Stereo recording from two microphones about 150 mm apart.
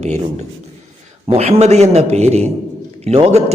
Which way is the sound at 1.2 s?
40° right (ahead or behind).